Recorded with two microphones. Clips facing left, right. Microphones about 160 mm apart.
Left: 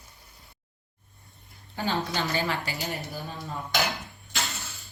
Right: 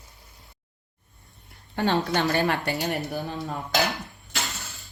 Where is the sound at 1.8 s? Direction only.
70° right (ahead or behind).